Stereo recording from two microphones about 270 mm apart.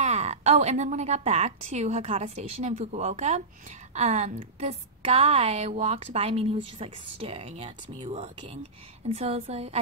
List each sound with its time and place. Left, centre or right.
0.0 s a woman's voice: right